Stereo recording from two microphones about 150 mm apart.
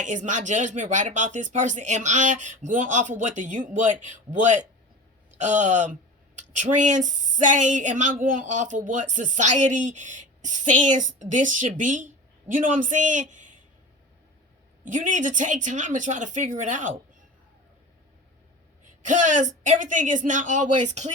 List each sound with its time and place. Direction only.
0.0 s speech: 55° right (ahead or behind)
14.8 s speech: 60° right (ahead or behind)
19.0 s speech: 55° right (ahead or behind)